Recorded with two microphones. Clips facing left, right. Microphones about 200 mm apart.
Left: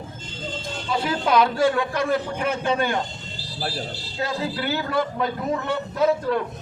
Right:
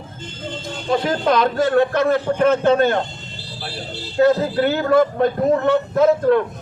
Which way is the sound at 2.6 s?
50° right (ahead or behind).